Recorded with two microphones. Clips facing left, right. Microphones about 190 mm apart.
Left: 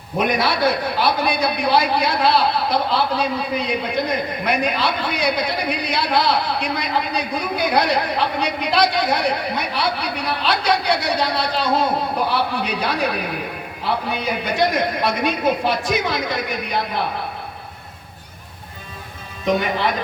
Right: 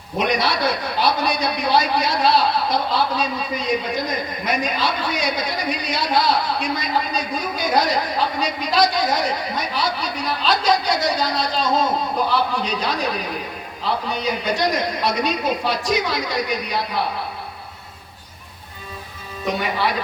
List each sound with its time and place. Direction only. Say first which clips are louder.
0.2 s a man's voice: left 2 dB; 55° left (ahead or behind)